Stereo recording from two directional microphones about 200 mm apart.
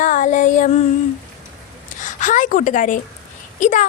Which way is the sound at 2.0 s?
40° left (ahead or behind).